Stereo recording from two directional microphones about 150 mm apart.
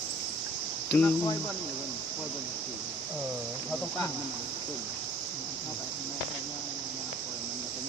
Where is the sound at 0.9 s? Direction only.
15° left (ahead or behind).